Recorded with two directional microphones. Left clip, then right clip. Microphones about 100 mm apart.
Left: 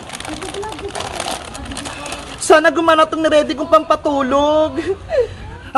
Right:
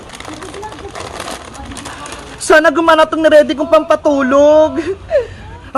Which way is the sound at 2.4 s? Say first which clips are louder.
Right 2 dB; 40° right (ahead or behind).